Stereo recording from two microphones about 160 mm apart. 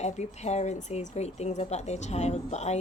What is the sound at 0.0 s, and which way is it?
A woman's voice, 45° left (ahead or behind).